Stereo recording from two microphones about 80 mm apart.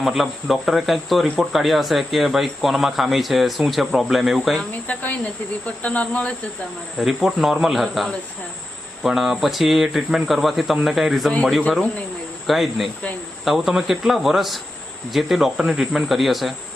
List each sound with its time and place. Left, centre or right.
0.0 s speech: centre
4.7 s speech: centre
7.0 s speech: centre
12.5 s speech: centre